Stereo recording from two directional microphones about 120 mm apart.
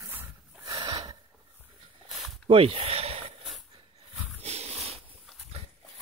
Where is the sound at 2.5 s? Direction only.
50° right (ahead or behind).